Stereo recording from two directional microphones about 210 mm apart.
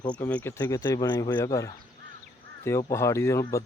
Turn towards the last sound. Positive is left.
turn(degrees=15)  # may be behind; listen again after turning